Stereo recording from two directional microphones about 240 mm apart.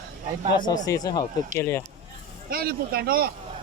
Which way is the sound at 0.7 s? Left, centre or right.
Centre.